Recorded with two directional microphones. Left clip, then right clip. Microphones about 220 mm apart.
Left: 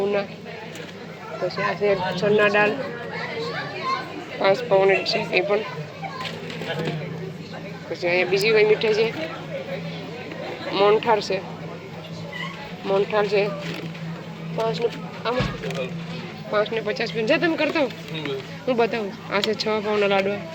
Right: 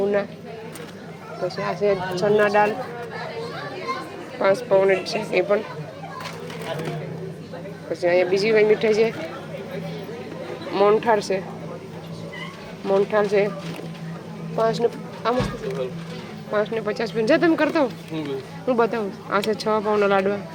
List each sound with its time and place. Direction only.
1.5 s speech: 20° right (ahead or behind)
4.4 s speech: 10° right (ahead or behind)
8.0 s speech: 20° right (ahead or behind)
10.8 s speech: 15° right (ahead or behind)
12.9 s speech: 10° right (ahead or behind)
14.7 s speech: 25° right (ahead or behind)
16.5 s speech: 15° right (ahead or behind)
18.7 s speech: 15° right (ahead or behind)